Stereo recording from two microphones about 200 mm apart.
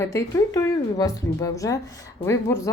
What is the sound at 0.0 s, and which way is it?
Speech, 15° left (ahead or behind).